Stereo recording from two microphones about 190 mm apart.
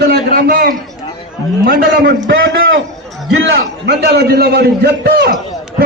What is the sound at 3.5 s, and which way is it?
A man's voice, 60° right (ahead or behind).